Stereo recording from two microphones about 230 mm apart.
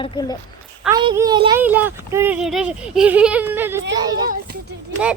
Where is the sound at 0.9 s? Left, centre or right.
Centre.